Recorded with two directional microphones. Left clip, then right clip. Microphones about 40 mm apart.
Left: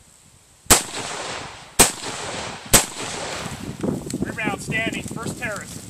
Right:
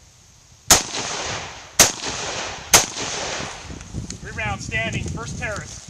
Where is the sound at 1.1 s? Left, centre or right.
Right.